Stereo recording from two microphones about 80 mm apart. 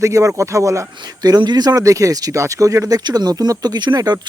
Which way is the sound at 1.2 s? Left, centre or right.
Right.